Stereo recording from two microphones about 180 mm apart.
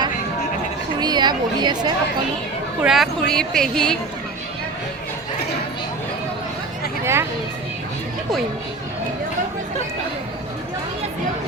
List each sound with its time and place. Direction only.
0.9 s a woman's voice: 25° right (ahead or behind)
2.8 s speech: centre (ahead or behind)
7.0 s speech: 15° right (ahead or behind)